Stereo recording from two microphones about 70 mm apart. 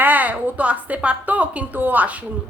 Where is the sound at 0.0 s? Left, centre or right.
Right.